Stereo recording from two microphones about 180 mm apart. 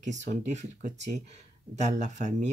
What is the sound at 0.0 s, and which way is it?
Speech, 40° right (ahead or behind).